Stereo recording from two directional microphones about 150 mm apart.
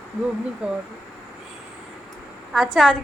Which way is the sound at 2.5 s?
Centre (ahead or behind).